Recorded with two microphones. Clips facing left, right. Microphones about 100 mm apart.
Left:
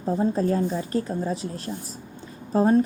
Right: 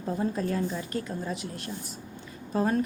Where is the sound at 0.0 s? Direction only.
30° left (ahead or behind).